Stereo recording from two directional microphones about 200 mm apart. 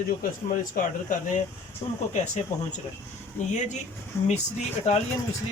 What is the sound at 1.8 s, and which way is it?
Speech, 25° left (ahead or behind).